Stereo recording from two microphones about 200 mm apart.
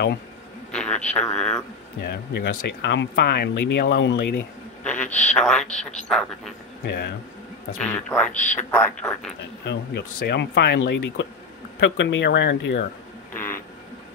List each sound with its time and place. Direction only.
0.7 s a man's voice: 5° left (ahead or behind)
2.0 s speech: 55° left (ahead or behind)
4.4 s speech: 5° left (ahead or behind)
6.8 s speech: 55° left (ahead or behind)
7.8 s speech: 5° left (ahead or behind)
8.3 s speech: 40° left (ahead or behind)
8.7 s speech: 5° left (ahead or behind)
9.7 s speech: 55° left (ahead or behind)
13.3 s a sound: 10° left (ahead or behind)